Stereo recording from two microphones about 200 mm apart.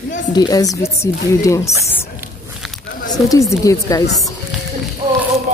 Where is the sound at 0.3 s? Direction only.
20° left (ahead or behind).